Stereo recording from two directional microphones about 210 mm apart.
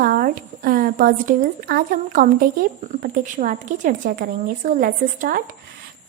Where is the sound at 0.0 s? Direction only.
45° right (ahead or behind).